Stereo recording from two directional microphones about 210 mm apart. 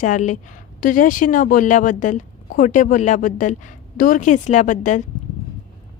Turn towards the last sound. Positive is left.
turn(degrees=35)  # may be behind; listen again after turning